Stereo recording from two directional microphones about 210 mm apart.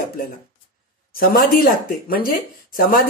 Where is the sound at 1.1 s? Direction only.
45° left (ahead or behind).